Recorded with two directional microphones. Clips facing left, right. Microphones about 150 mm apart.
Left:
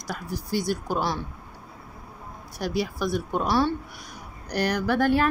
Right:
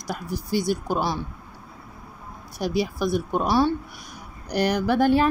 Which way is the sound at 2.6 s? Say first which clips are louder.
Right 3 dB; 20° right (ahead or behind).